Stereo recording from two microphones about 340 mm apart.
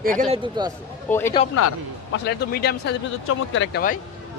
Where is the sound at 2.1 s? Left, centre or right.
Left.